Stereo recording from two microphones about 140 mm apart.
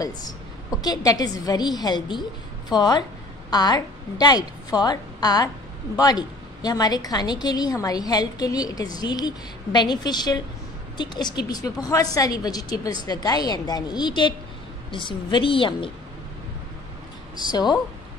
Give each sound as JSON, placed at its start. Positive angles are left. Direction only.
{"t": 0.7, "sound": "a woman's voice", "side_deg": 25}
{"t": 17.5, "sound": "a woman's voice", "side_deg": 30}